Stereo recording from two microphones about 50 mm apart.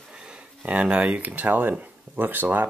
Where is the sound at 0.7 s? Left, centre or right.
Right.